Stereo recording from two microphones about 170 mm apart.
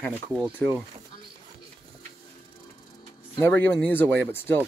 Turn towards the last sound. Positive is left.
turn(degrees=10)  # may be behind; listen again after turning